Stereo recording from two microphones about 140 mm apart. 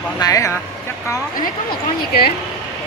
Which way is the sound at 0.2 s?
25° left (ahead or behind).